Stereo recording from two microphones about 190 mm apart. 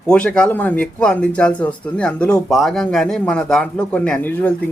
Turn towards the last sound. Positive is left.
turn(degrees=10)  # may be behind; listen again after turning